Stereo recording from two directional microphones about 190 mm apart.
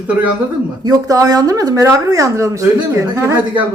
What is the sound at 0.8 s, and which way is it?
Speech, 20° right (ahead or behind).